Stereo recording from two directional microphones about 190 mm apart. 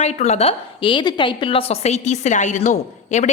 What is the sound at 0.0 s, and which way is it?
A woman's voice, 35° left (ahead or behind).